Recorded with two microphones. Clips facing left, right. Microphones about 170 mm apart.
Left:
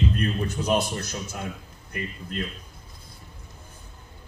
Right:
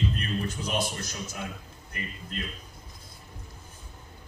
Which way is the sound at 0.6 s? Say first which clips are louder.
Left 10 dB; 65° left (ahead or behind).